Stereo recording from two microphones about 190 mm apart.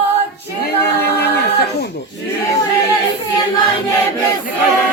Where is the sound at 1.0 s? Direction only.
60° left (ahead or behind).